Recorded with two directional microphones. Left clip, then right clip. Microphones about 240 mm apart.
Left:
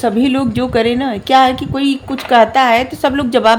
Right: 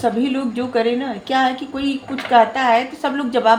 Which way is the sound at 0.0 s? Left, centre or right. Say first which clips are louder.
Left 5 dB; left.